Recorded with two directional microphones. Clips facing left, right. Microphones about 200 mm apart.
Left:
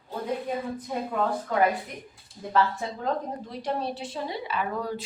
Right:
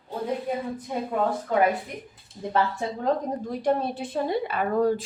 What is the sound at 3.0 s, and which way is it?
A woman's voice, 50° right (ahead or behind).